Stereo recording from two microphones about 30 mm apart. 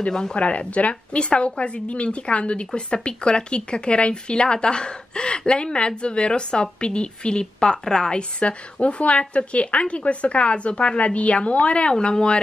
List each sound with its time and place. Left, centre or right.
0.1 s a woman's voice: left
0.7 s a woman's voice: left
8.2 s speech: left